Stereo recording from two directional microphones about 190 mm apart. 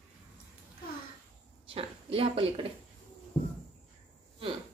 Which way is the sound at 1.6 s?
30° right (ahead or behind).